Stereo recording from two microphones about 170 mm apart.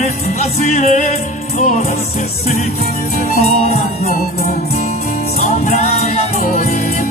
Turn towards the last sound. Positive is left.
turn(degrees=45)  # may be behind; listen again after turning